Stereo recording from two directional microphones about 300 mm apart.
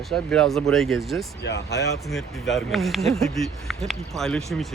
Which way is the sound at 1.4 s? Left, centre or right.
Left.